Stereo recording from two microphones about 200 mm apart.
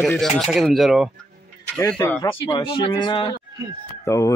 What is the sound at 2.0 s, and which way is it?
Speech, 15° left (ahead or behind).